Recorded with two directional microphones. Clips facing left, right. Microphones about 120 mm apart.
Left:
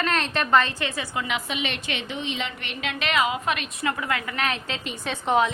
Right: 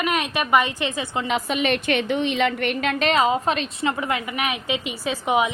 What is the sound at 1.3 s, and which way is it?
A woman's voice, 45° right (ahead or behind).